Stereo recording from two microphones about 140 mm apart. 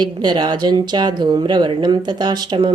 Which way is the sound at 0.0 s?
30° right (ahead or behind).